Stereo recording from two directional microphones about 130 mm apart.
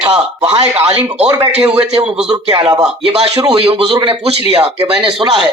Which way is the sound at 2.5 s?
35° right (ahead or behind).